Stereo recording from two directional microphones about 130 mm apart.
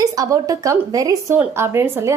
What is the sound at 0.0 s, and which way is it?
A woman's voice, 30° right (ahead or behind).